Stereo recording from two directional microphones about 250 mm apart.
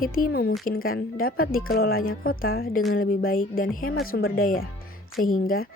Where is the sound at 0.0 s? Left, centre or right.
Left.